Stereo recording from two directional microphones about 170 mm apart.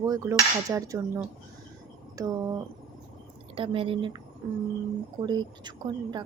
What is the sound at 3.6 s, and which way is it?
Speech, 30° right (ahead or behind).